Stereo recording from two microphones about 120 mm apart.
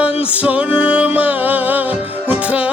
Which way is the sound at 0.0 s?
10° right (ahead or behind).